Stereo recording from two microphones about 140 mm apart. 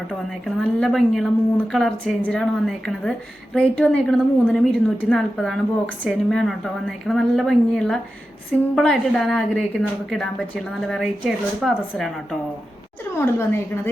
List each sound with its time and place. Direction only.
0.1 s a woman's voice: 5° left (ahead or behind)
13.1 s a woman's voice: 15° left (ahead or behind)